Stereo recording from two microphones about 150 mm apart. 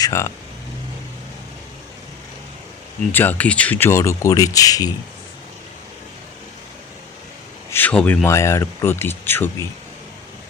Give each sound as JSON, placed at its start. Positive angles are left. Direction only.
{"t": 0.0, "sound": "speech", "side_deg": 20}
{"t": 3.1, "sound": "speech", "side_deg": 15}
{"t": 7.7, "sound": "speech", "side_deg": 10}